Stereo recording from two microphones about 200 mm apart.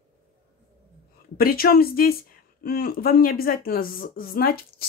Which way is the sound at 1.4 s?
50° left (ahead or behind).